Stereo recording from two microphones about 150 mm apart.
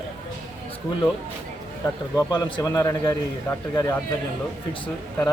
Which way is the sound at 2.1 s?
25° left (ahead or behind).